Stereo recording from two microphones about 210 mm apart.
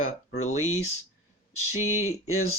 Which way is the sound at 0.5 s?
80° left.